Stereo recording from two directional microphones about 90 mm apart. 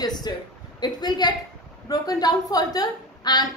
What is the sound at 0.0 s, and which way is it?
A woman's voice, 50° left (ahead or behind).